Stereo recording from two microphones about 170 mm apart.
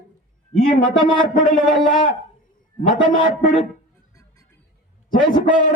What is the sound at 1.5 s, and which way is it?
Speech, centre (ahead or behind).